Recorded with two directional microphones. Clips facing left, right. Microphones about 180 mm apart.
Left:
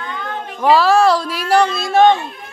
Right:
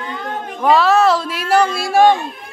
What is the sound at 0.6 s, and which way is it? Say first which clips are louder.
Speech: left 1 dB; centre (ahead or behind).